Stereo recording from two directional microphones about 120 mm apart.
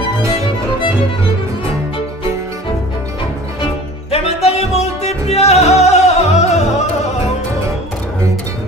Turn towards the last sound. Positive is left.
turn(degrees=65)  # may be behind; listen again after turning